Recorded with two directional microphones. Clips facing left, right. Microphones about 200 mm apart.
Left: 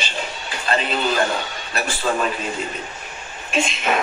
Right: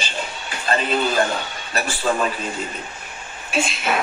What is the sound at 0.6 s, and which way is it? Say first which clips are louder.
Speech: right 1 dB; 45° right (ahead or behind).